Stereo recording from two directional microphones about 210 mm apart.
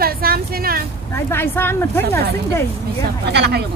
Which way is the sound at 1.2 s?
10° left (ahead or behind).